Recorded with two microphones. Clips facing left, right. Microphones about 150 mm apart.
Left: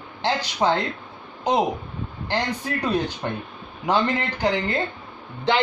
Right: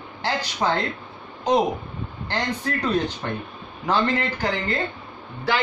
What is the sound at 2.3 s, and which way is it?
Speech, 15° left (ahead or behind).